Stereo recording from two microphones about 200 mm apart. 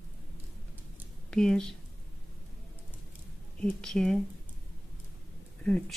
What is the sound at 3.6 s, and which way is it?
Speech, 5° left (ahead or behind).